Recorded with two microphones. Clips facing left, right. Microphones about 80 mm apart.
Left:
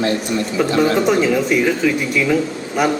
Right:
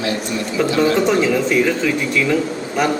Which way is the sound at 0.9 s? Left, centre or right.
Centre.